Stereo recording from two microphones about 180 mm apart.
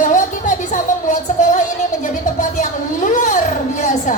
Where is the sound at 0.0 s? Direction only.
45° left (ahead or behind).